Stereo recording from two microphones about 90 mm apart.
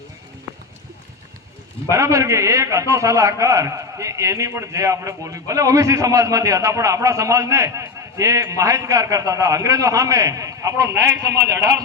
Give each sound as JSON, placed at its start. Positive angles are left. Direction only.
{"t": 1.9, "sound": "a man's voice", "side_deg": -35}